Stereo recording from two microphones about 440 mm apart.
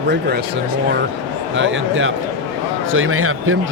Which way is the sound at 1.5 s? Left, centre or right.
Right.